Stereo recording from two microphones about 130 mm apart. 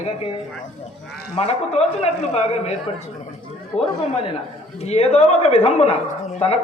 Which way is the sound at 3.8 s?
55° left (ahead or behind).